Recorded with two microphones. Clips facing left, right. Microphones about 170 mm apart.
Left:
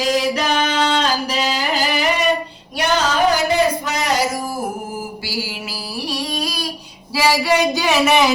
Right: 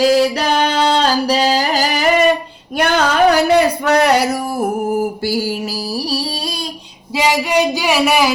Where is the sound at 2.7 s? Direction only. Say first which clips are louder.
Right 4 dB; 60° right (ahead or behind).